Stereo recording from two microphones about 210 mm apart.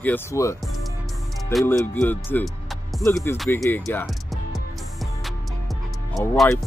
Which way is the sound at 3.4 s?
10° left (ahead or behind).